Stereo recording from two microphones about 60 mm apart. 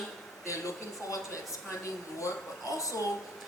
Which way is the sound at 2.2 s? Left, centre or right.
Left.